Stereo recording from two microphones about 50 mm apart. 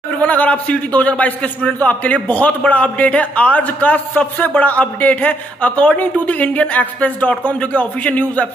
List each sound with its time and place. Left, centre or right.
0.2 s a man's voice: left